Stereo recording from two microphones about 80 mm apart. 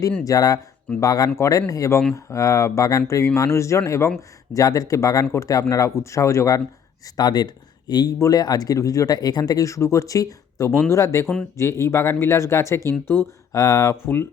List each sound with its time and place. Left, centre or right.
0.3 s speech: left
4.5 s speech: left
7.2 s speech: left
13.6 s speech: left
14.0 s speech: left